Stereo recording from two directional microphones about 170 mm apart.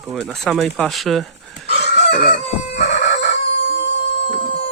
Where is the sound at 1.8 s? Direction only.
90° left.